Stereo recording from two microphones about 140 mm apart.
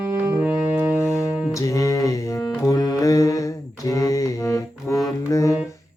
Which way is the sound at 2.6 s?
25° left (ahead or behind).